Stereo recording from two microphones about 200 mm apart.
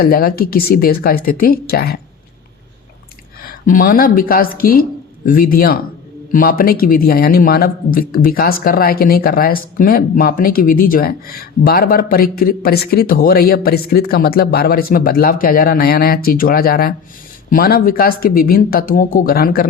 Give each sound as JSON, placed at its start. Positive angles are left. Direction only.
{"t": 0.0, "sound": "speech", "side_deg": 45}
{"t": 3.4, "sound": "speech", "side_deg": 45}